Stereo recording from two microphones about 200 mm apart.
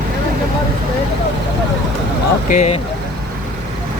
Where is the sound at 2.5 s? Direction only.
35° left (ahead or behind).